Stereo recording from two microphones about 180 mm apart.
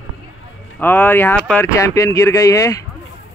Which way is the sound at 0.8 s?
10° left (ahead or behind).